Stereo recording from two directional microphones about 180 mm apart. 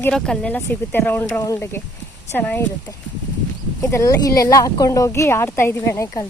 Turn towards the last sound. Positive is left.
turn(degrees=15)  # may be behind; listen again after turning